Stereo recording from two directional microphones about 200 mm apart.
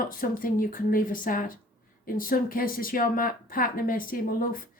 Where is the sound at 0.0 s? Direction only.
45° left (ahead or behind).